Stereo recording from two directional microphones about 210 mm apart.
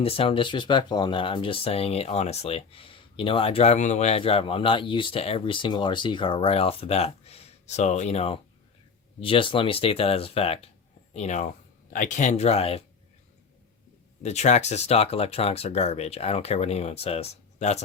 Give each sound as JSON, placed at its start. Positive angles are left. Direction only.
{"t": 0.0, "sound": "speech", "side_deg": 25}
{"t": 14.2, "sound": "speech", "side_deg": 30}